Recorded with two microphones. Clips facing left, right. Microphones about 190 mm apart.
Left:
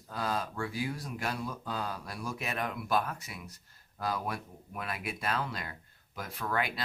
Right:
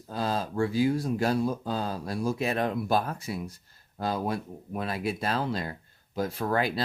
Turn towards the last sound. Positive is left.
turn(degrees=-35)  # may be behind; listen again after turning